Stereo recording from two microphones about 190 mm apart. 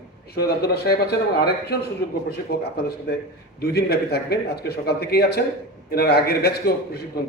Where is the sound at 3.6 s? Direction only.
55° left (ahead or behind).